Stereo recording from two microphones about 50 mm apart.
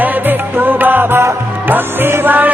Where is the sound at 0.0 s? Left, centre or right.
Right.